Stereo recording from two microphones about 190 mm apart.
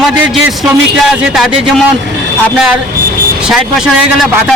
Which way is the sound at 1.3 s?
Centre (ahead or behind).